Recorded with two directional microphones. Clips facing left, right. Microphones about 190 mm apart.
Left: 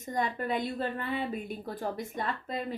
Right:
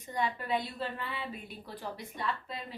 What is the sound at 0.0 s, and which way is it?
A woman's voice, 45° left (ahead or behind).